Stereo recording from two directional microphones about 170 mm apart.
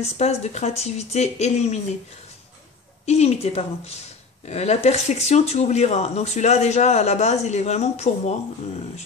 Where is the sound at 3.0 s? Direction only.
40° left (ahead or behind).